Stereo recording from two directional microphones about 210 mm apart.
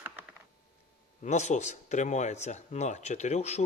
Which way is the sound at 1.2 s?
35° left (ahead or behind).